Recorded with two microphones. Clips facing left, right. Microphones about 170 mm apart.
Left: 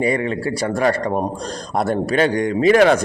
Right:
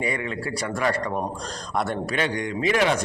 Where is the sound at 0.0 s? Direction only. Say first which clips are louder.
Left 8 dB; 35° left (ahead or behind).